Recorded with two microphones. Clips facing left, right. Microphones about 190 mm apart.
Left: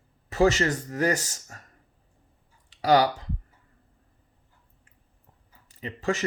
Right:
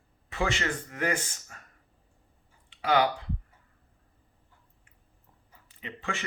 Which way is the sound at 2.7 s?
40° left (ahead or behind).